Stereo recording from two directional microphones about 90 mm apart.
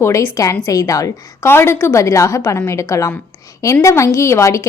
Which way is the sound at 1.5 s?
25° left (ahead or behind).